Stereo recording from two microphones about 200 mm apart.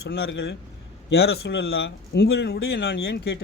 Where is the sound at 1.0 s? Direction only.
55° left (ahead or behind).